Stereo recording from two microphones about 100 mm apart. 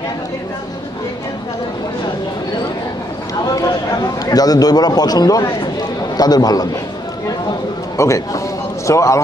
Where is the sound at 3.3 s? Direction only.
35° left (ahead or behind).